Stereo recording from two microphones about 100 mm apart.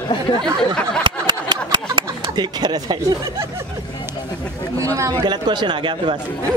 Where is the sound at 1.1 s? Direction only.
50° right (ahead or behind).